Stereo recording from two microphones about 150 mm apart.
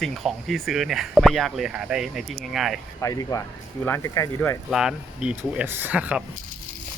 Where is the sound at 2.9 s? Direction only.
20° left (ahead or behind).